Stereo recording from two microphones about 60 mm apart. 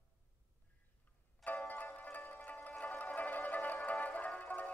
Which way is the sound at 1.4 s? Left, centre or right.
Left.